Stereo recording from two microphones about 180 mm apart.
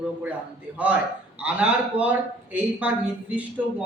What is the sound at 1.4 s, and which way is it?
A man's voice, 5° right (ahead or behind).